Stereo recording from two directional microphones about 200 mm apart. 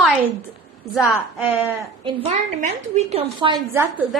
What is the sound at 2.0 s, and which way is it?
A woman's voice, 35° right (ahead or behind).